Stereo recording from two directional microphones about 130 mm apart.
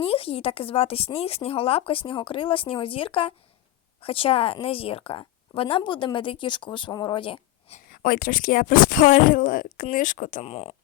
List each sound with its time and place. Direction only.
0.0 s a woman's voice: 45° left (ahead or behind)
7.7 s speech: 90° left
10.4 s speech: 50° left (ahead or behind)